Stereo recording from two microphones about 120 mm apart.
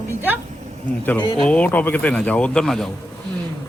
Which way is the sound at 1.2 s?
40° left (ahead or behind).